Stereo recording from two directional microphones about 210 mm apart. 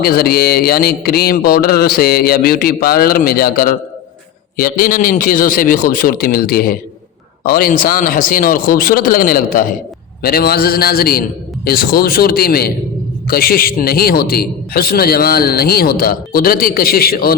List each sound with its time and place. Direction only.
0.0 s a man's voice: 45° left (ahead or behind)